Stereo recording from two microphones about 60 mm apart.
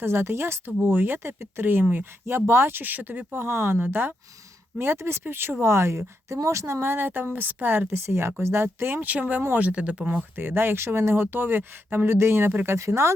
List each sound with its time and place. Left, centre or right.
0.0 s speech: right
2.2 s speech: right; by 10.2 s centre
10.3 s speech: right
12.6 s speech: right